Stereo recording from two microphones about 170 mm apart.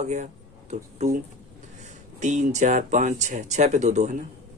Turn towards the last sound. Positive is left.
turn(degrees=-45)  # may be behind; listen again after turning